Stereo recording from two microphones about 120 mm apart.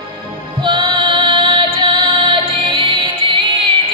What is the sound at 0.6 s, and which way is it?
Female singing, 45° right (ahead or behind).